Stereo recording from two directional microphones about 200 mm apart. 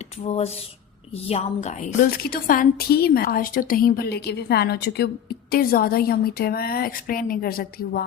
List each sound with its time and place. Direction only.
0.3 s a woman's voice: 30° left (ahead or behind); by 8.0 s 50° left (ahead or behind)